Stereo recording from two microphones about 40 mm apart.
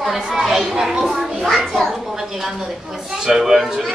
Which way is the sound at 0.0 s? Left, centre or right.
Centre.